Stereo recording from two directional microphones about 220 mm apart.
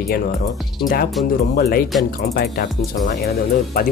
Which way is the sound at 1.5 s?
45° left (ahead or behind).